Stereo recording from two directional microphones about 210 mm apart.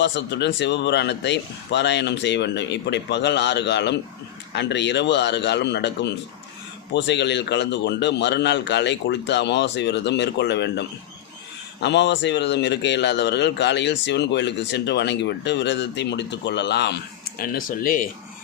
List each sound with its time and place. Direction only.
0.0 s a man's voice: 55° left (ahead or behind); by 18.1 s 40° left (ahead or behind)